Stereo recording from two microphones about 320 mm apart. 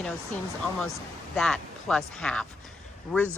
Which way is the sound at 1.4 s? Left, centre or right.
Centre.